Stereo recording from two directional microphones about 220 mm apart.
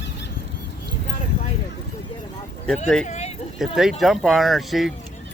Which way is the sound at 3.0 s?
30° left (ahead or behind).